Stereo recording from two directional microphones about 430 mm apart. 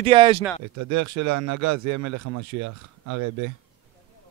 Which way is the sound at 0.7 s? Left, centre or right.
Right.